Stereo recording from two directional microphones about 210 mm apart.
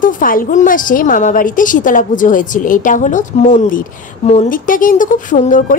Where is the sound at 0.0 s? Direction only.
40° left (ahead or behind).